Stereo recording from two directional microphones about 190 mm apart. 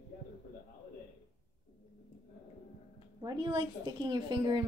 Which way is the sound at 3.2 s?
20° right (ahead or behind).